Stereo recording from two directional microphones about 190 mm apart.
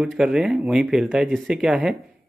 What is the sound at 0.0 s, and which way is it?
Speech, 5° right (ahead or behind).